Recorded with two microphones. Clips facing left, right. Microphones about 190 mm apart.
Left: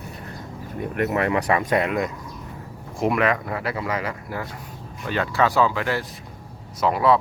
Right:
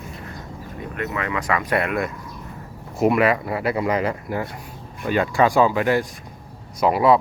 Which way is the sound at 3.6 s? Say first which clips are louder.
Right 5 dB; 20° right (ahead or behind).